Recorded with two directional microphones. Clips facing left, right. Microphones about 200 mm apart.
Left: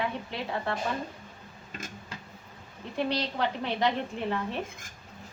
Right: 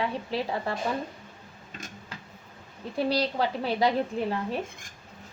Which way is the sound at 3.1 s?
35° right (ahead or behind).